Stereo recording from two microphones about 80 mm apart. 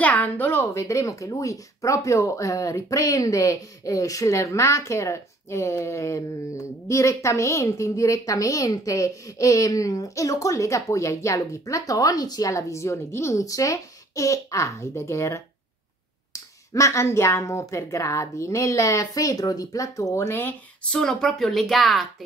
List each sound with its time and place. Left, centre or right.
0.0 s speech: centre
20.9 s a woman's voice: centre